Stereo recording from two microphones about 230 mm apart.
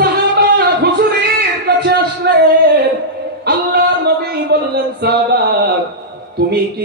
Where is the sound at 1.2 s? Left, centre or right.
Right.